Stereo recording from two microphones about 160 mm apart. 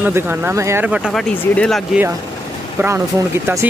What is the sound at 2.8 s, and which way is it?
Speech, 15° right (ahead or behind).